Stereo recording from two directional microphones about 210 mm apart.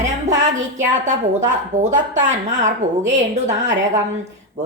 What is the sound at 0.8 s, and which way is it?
Speech, 35° right (ahead or behind).